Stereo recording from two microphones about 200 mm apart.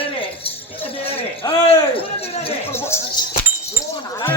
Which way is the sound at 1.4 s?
15° left (ahead or behind).